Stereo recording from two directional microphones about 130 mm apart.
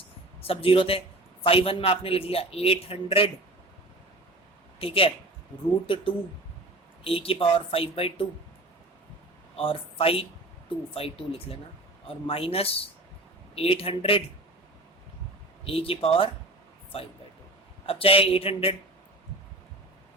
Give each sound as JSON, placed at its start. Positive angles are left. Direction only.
{"t": 0.4, "sound": "a man's voice", "side_deg": 45}
{"t": 4.8, "sound": "a man's voice", "side_deg": 45}
{"t": 9.6, "sound": "a man's voice", "side_deg": 45}
{"t": 15.6, "sound": "a man's voice", "side_deg": 45}